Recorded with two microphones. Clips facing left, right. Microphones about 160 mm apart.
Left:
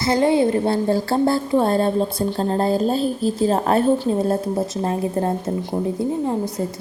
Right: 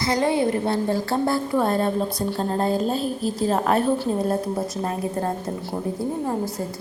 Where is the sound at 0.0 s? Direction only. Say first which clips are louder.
Left 4 dB; 25° left (ahead or behind).